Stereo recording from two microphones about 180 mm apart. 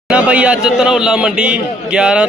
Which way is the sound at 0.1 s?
5° right (ahead or behind).